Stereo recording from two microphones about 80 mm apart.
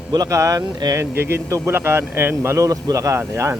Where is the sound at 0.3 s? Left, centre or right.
Right.